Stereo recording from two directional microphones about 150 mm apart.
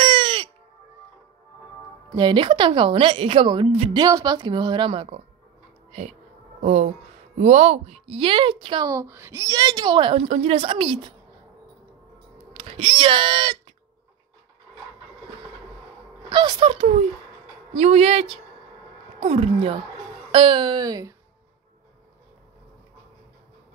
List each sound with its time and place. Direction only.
0.0 s a sound: 35° right (ahead or behind)
2.1 s a woman's voice: 30° right (ahead or behind)
3.9 s a woman's voice: 25° right (ahead or behind)
6.6 s a woman's voice: 50° right (ahead or behind); by 10.2 s 35° right (ahead or behind)
10.2 s a woman's voice: 45° right (ahead or behind)
12.5 s a child's voice: 40° right (ahead or behind)
16.3 s a woman's voice: 30° right (ahead or behind)